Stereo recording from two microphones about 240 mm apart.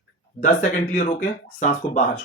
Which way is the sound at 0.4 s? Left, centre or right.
Left.